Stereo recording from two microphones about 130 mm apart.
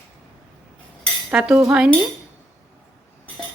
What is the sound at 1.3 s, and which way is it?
Cutlery, 10° right (ahead or behind).